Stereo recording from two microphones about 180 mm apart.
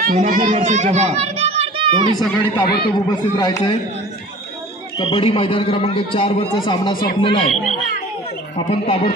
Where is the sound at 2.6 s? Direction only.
60° left (ahead or behind).